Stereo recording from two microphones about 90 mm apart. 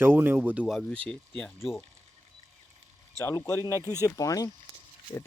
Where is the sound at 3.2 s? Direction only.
35° left (ahead or behind).